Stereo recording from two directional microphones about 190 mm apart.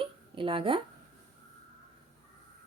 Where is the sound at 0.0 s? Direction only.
25° right (ahead or behind).